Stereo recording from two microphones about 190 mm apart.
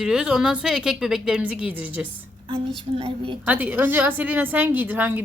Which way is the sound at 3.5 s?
10° right (ahead or behind).